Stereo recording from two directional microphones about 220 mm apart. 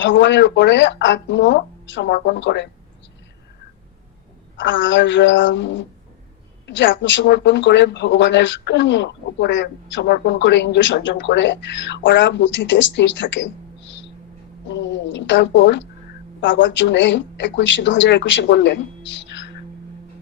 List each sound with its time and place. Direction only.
0.0 s speech: 55° left (ahead or behind)
4.5 s a woman's voice: 55° left (ahead or behind)